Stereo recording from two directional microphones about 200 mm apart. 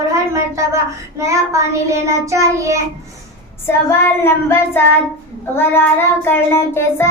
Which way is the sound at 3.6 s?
10° left (ahead or behind).